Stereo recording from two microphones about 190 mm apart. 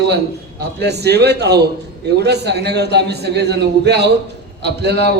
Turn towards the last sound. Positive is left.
turn(degrees=-60)  # may be behind; listen again after turning